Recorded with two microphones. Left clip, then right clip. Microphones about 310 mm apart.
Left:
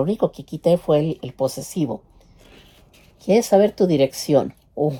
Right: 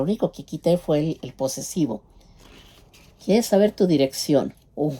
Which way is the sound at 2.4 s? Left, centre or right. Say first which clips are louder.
Even; centre.